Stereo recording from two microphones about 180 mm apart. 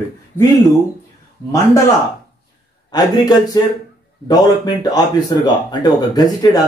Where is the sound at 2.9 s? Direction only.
20° left (ahead or behind).